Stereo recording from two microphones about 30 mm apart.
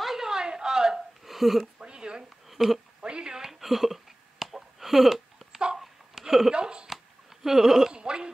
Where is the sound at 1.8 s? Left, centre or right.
Right.